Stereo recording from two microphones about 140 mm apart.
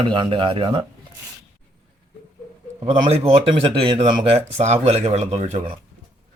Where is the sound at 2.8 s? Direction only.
45° right (ahead or behind).